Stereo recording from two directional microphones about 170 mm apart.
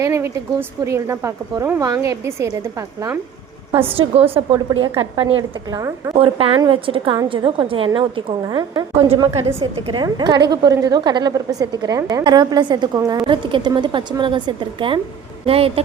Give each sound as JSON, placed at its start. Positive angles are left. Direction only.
{"t": 0.0, "sound": "a woman's voice", "side_deg": -15}
{"t": 3.9, "sound": "a woman's voice", "side_deg": -30}
{"t": 6.1, "sound": "a woman's voice", "side_deg": -35}